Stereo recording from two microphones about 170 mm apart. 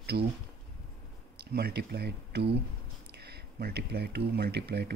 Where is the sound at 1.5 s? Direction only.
70° right (ahead or behind).